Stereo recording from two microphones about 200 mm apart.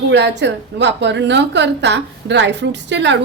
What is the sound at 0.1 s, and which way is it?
A woman's voice, 60° right (ahead or behind).